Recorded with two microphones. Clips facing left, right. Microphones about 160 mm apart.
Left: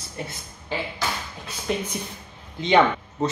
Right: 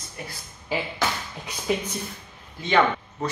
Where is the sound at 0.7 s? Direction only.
10° right (ahead or behind).